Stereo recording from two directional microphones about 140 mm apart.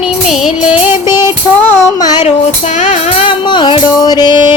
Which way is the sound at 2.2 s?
50° left (ahead or behind).